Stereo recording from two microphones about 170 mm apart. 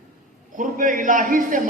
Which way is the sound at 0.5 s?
50° right (ahead or behind).